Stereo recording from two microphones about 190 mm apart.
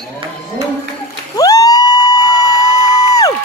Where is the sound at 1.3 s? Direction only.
20° left (ahead or behind).